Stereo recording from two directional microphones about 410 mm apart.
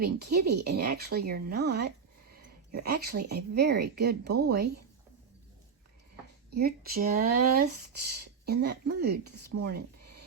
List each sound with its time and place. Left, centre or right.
0.0 s speech: right
6.5 s speech: right
9.6 s a sound: right